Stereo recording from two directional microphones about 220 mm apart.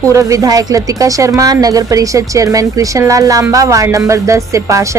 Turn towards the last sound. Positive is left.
turn(degrees=-15)  # may be behind; listen again after turning